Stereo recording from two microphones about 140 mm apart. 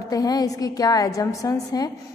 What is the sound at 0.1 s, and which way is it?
A woman's voice, 25° left (ahead or behind).